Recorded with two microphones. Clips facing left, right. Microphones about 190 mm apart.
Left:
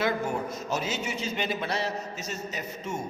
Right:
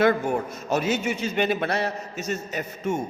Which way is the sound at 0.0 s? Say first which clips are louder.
Right 7 dB; 55° right (ahead or behind).